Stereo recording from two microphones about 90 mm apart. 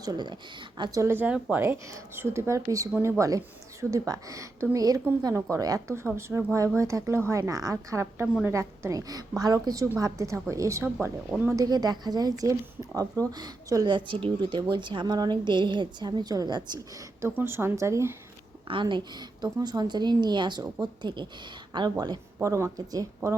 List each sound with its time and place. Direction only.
0.0 s speech: 50° right (ahead or behind)
1.0 s speech: 25° right (ahead or behind)
1.3 s speech: 15° right (ahead or behind)
1.6 s a woman's voice: 25° right (ahead or behind)
17.2 s speech: 25° right (ahead or behind)
18.7 s a woman's voice: 60° right (ahead or behind)
22.4 s a woman's voice: 35° right (ahead or behind)